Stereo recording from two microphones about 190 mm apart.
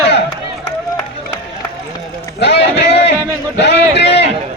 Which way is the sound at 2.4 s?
65° left (ahead or behind).